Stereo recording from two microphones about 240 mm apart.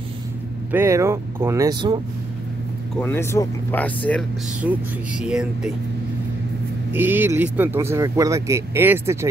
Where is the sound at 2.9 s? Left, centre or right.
Centre.